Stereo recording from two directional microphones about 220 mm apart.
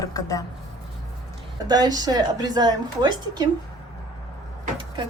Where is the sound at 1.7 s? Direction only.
20° right (ahead or behind).